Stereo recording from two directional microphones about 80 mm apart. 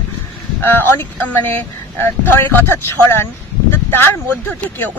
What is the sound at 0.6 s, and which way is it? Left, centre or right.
A woman's voice, left.